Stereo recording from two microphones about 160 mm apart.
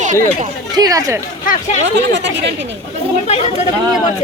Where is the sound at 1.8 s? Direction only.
90° right.